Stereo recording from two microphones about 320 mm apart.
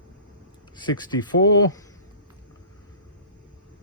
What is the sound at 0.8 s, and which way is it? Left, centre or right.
Speech, centre.